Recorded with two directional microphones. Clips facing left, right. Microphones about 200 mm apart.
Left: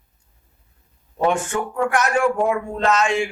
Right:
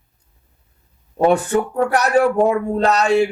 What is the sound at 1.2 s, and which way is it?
Speech, 35° right (ahead or behind).